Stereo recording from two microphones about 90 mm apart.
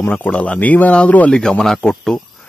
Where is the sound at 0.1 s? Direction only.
15° left (ahead or behind).